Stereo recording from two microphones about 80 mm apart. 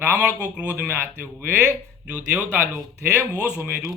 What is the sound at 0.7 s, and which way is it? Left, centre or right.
Speech, right.